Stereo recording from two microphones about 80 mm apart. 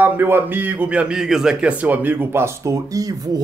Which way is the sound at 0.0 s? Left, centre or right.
Right.